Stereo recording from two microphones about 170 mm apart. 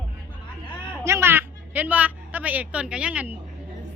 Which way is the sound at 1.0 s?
15° right (ahead or behind).